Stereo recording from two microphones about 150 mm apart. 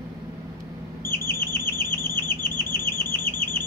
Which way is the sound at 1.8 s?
15° left (ahead or behind).